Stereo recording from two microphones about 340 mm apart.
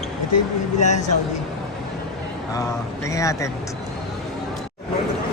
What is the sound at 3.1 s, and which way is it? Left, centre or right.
Speech, centre.